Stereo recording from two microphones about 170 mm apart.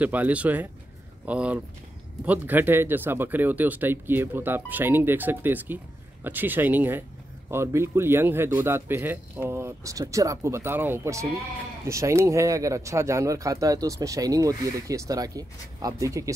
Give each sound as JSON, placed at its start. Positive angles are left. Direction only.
{"t": 0.0, "sound": "speech", "side_deg": -10}